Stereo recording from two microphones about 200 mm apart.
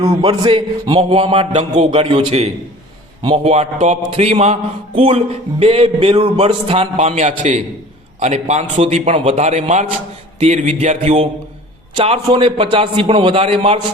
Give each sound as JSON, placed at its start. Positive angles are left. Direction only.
{"t": 0.0, "sound": "a man's voice", "side_deg": -20}